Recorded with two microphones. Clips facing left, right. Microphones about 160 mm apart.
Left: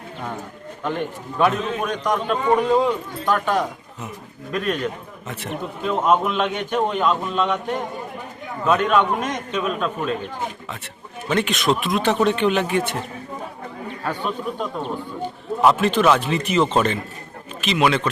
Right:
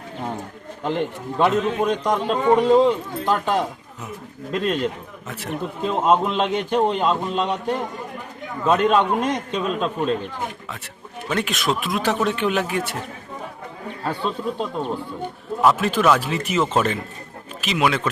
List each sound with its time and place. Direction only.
1.4 s a man's voice: 25° right (ahead or behind)
8.6 s a man's voice: 30° right (ahead or behind)
11.3 s speech: centre (ahead or behind)
14.0 s a man's voice: 30° right (ahead or behind)
15.6 s speech: 5° right (ahead or behind)